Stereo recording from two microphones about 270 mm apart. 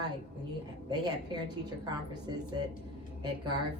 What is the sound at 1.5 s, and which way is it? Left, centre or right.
Speech, centre.